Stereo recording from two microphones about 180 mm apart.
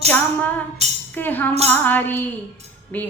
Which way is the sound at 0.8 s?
35° right (ahead or behind).